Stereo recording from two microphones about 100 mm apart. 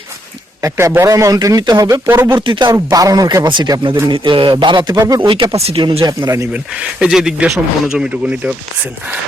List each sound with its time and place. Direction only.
0.6 s speech: 30° right (ahead or behind)
2.4 s speech: 50° right (ahead or behind)
2.7 s a man's voice: 35° right (ahead or behind); by 4.9 s 50° right (ahead or behind)
4.9 s speech: 35° right (ahead or behind)
5.2 s speech: 50° right (ahead or behind)
5.5 s speech: 80° right
6.0 s speech: 35° right (ahead or behind)
6.5 s speech: 10° right (ahead or behind)